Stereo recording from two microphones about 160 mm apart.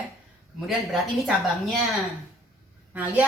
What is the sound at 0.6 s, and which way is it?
A woman's voice, centre (ahead or behind).